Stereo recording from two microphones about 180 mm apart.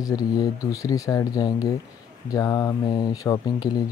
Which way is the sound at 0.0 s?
20° left (ahead or behind).